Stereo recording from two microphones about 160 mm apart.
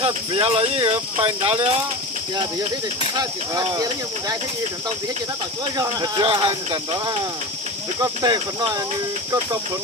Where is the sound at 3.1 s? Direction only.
25° right (ahead or behind).